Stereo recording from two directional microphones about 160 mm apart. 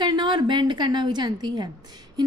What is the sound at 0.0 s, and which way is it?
A woman's voice, 30° right (ahead or behind).